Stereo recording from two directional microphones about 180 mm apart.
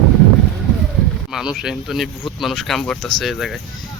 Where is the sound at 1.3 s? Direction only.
5° right (ahead or behind).